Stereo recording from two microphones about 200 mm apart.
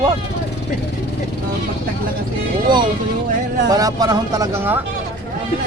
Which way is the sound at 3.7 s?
20° right (ahead or behind).